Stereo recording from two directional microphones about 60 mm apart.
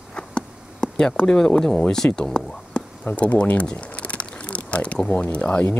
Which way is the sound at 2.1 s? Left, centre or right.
Centre.